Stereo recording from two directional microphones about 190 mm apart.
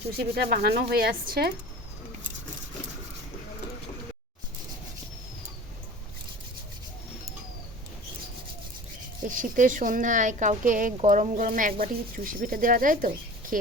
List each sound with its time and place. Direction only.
0.2 s speech: 55° right (ahead or behind)
9.2 s speech: 45° right (ahead or behind)